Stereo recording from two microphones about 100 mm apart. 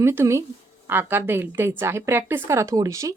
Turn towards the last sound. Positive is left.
turn(degrees=-30)  # may be behind; listen again after turning